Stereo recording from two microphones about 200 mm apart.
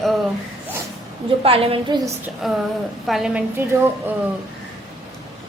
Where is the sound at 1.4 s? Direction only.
30° right (ahead or behind).